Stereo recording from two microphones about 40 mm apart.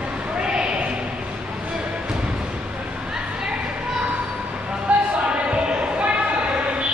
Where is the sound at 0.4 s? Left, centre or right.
Centre.